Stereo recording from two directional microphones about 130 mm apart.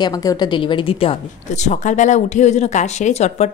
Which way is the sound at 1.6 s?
70° left (ahead or behind).